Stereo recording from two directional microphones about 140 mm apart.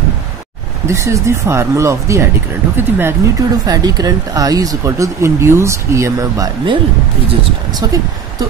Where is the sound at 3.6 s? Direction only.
30° right (ahead or behind).